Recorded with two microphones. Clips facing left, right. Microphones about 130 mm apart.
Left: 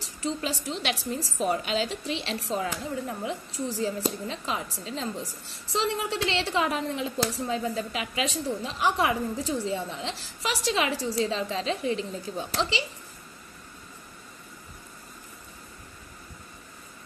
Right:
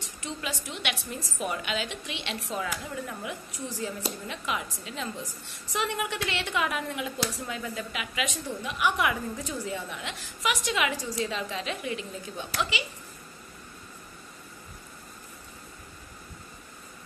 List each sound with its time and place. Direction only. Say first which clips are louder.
0.0 s a woman's voice: left 6 dB; 35° left (ahead or behind)